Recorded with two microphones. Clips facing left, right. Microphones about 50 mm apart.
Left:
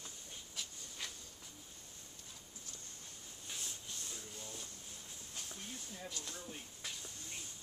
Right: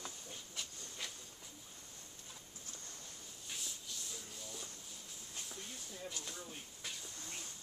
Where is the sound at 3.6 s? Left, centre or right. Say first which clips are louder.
Even; left.